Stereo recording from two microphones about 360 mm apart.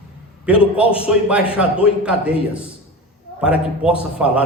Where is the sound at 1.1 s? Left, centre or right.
Centre.